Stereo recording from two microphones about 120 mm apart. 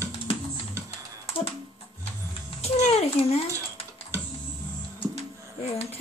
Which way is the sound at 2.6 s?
60° left (ahead or behind).